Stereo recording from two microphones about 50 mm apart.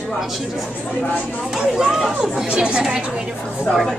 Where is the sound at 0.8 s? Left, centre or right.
Left.